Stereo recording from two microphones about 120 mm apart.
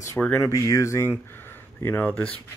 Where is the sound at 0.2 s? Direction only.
20° left (ahead or behind).